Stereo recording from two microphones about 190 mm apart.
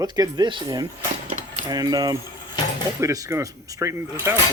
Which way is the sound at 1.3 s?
40° right (ahead or behind).